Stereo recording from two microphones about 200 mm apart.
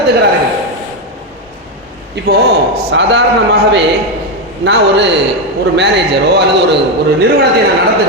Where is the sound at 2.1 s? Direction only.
55° right (ahead or behind).